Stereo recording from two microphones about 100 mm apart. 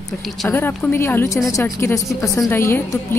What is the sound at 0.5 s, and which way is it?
A woman's voice, 20° left (ahead or behind).